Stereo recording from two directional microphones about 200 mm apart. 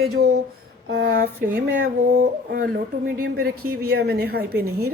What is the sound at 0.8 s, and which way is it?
Speech, 50° right (ahead or behind).